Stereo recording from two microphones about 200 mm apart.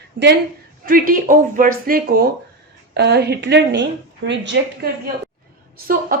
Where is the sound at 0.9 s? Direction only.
45° right (ahead or behind).